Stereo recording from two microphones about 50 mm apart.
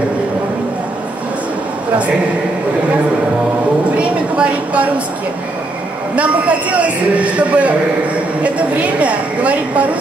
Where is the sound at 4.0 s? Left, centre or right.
Right.